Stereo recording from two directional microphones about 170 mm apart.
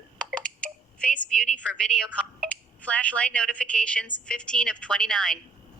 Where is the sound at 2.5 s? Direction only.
5° left (ahead or behind).